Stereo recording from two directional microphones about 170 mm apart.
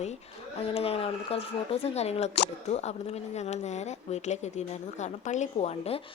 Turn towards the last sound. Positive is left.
turn(degrees=35)  # may be behind; listen again after turning